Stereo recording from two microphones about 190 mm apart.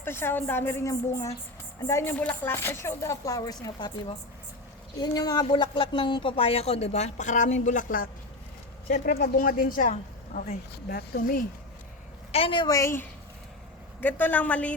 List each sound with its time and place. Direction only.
0.0 s speech: 10° left (ahead or behind)
4.9 s a woman's voice: 20° left (ahead or behind); by 10.6 s 40° left (ahead or behind)
10.7 s a woman's voice: 55° left (ahead or behind)
12.3 s a woman's voice: 30° left (ahead or behind); by 14.8 s 5° left (ahead or behind)